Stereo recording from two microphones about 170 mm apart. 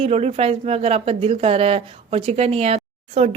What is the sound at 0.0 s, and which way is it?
Speech, 40° right (ahead or behind).